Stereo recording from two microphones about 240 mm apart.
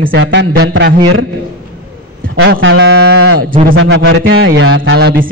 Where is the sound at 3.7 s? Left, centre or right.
Right.